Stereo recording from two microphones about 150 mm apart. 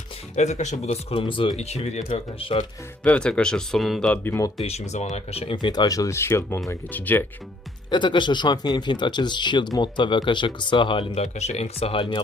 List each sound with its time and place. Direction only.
0.3 s speech: 50° left (ahead or behind)
1.1 s speech: 35° left (ahead or behind)
3.0 s speech: 10° left (ahead or behind)
4.1 s speech: 15° left (ahead or behind)
4.6 s speech: 45° left (ahead or behind)
5.6 s speech: 25° left (ahead or behind)
7.9 s speech: 30° left (ahead or behind)